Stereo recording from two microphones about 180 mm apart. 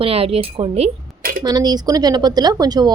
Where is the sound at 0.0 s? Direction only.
35° right (ahead or behind).